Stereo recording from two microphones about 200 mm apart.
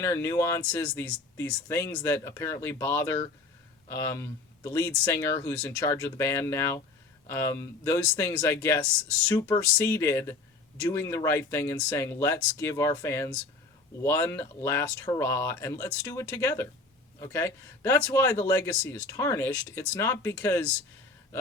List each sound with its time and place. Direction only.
0.0 s a man's voice: 15° left (ahead or behind)